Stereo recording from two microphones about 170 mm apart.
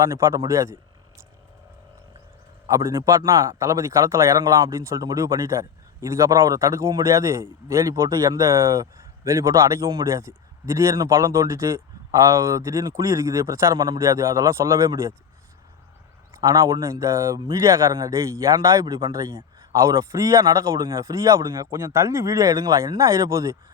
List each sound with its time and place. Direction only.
0.0 s a man's voice: 15° right (ahead or behind)
2.6 s a man's voice: 20° right (ahead or behind)
16.4 s speech: 20° right (ahead or behind)